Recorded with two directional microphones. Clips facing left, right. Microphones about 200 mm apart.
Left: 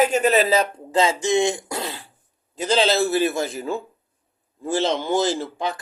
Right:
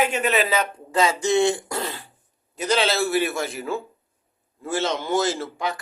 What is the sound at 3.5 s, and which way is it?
A man's voice, 35° left (ahead or behind).